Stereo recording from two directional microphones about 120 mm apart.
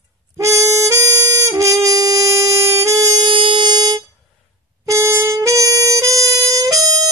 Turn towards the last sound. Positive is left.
turn(degrees=-30)  # may be behind; listen again after turning